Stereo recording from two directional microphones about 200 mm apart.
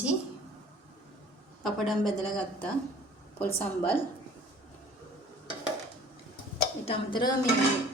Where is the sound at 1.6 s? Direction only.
Centre (ahead or behind).